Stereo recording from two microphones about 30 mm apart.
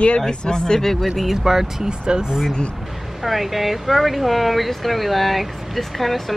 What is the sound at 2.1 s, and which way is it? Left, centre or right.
Speech, right.